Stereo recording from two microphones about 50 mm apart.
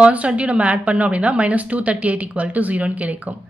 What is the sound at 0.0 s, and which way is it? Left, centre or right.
A woman's voice, right.